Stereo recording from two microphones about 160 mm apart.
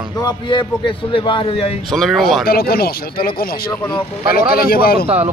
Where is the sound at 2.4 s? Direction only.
70° left (ahead or behind).